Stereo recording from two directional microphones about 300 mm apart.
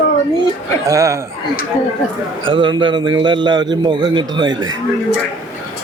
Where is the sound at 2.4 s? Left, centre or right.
Centre.